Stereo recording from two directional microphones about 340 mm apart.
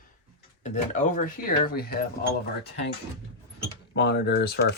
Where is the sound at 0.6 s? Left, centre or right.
Left.